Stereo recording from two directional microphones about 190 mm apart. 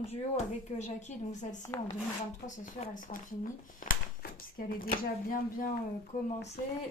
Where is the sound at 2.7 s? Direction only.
40° left (ahead or behind).